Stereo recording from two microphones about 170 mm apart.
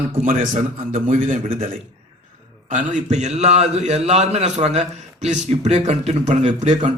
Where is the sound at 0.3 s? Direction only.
50° right (ahead or behind).